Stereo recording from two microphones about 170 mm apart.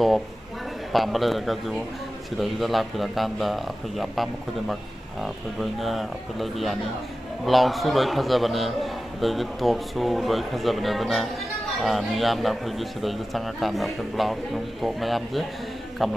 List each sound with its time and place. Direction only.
0.9 s a man's voice: centre (ahead or behind)